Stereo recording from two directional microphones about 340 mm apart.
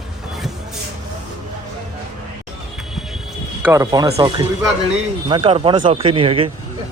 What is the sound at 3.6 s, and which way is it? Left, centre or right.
Speech, centre.